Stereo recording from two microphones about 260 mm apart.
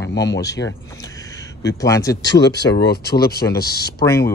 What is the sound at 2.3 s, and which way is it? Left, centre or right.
Speech, left.